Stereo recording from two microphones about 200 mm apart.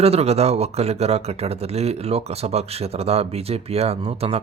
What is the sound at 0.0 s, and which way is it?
Speech, 30° right (ahead or behind).